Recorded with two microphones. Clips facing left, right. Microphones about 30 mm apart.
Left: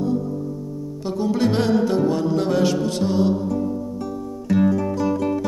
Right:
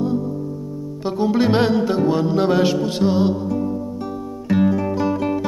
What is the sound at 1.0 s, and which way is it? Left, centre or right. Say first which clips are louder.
Music: right 3 dB; right.